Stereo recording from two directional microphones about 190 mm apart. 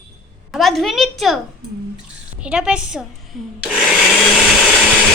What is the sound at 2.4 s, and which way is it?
Speech, 5° right (ahead or behind).